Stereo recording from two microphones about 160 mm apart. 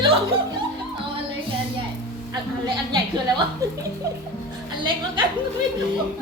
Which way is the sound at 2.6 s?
30° right (ahead or behind).